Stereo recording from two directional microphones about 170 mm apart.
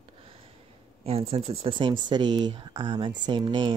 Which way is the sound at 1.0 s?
35° right (ahead or behind).